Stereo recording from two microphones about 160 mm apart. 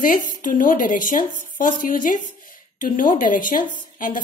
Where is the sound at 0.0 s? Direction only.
55° left (ahead or behind).